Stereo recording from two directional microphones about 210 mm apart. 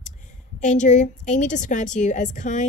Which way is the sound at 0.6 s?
35° left (ahead or behind).